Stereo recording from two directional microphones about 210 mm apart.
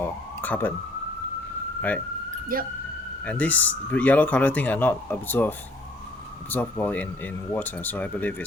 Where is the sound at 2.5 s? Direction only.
45° right (ahead or behind).